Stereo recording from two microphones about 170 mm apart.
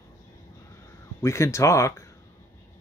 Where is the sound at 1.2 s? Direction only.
15° left (ahead or behind).